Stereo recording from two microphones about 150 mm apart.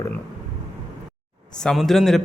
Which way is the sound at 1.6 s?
Centre (ahead or behind).